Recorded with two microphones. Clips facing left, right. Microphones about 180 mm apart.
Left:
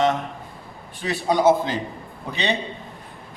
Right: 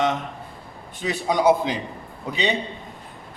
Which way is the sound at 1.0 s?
15° right (ahead or behind).